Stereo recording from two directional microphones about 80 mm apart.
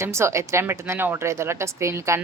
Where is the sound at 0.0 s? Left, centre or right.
Right.